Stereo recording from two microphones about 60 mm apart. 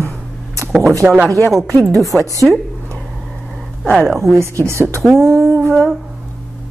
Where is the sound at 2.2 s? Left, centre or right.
Right.